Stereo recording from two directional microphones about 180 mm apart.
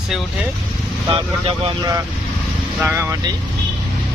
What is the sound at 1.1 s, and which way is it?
Speech, 30° right (ahead or behind).